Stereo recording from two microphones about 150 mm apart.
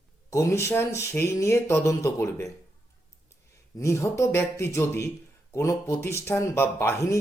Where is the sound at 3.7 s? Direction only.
20° left (ahead or behind).